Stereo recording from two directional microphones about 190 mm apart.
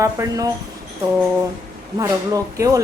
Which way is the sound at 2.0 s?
15° right (ahead or behind).